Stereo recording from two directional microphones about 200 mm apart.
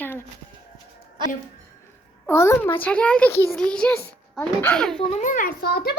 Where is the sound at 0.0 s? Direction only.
10° left (ahead or behind).